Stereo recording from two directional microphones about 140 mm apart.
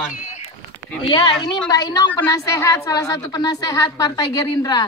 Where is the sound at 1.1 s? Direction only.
30° left (ahead or behind).